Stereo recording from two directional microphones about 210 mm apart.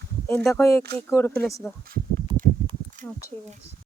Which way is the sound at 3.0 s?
35° right (ahead or behind).